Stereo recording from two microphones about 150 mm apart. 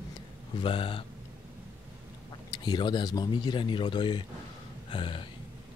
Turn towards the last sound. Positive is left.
turn(degrees=35)  # may be behind; listen again after turning